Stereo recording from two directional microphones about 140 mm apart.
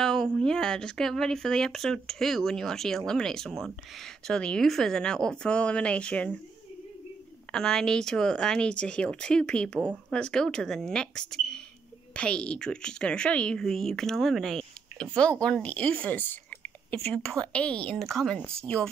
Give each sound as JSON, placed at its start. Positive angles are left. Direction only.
{"t": 0.0, "sound": "speech", "side_deg": 5}
{"t": 7.5, "sound": "speech", "side_deg": 5}